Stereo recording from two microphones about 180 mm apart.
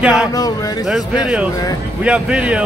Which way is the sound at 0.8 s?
Centre (ahead or behind).